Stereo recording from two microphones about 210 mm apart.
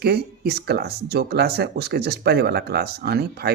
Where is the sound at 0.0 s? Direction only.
50° right (ahead or behind).